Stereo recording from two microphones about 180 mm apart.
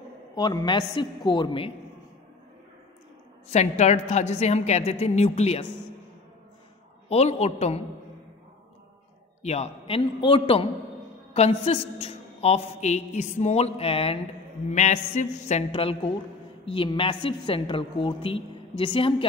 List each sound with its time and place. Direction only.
0.4 s a woman's voice: 25° left (ahead or behind)
3.4 s a man's voice: 40° left (ahead or behind)
7.1 s a man's voice: 35° left (ahead or behind)
9.4 s a man's voice: 35° left (ahead or behind)
15.7 s a woman's voice: 30° left (ahead or behind)